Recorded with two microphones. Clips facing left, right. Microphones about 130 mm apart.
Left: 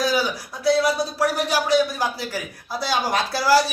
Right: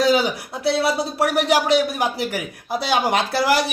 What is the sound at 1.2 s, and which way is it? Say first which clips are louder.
Speech: right 5 dB; 70° right (ahead or behind).